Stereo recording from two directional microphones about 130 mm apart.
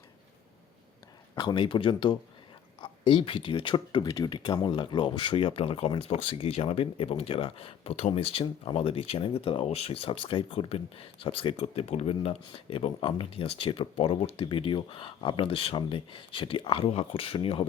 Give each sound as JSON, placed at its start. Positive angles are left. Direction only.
{"t": 1.4, "sound": "speech", "side_deg": 35}